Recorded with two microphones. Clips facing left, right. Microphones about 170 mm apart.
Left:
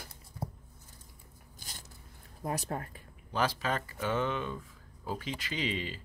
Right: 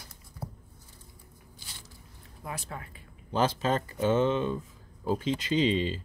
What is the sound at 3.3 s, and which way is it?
Speech, 25° right (ahead or behind).